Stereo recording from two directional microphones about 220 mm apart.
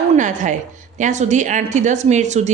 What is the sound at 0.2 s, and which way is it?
Speech, 35° right (ahead or behind).